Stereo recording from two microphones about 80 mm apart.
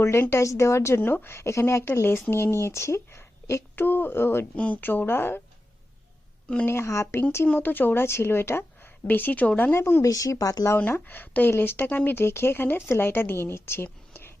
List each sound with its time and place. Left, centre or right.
0.0 s speech: left
4.5 s speech: centre
6.7 s speech: left
7.4 s speech: left
9.7 s speech: left
10.1 s speech: left
10.8 s speech: left